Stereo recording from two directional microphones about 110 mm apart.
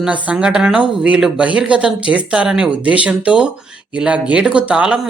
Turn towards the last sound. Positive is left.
turn(degrees=-10)  # may be behind; listen again after turning